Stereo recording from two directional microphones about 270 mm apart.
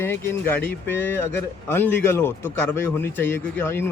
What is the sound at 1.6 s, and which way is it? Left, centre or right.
Speech, centre.